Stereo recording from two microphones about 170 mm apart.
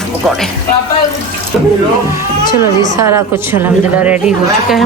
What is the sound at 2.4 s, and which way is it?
Speech, 25° left (ahead or behind).